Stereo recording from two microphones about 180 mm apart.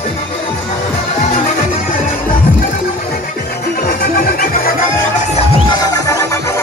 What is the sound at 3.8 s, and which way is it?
Music, 55° left (ahead or behind).